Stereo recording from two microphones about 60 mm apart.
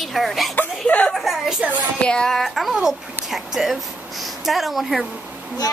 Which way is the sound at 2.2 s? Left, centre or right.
Centre.